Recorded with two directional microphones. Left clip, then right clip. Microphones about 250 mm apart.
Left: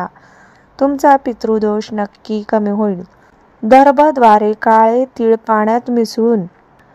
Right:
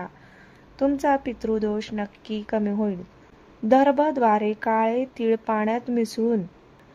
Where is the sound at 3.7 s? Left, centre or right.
Centre.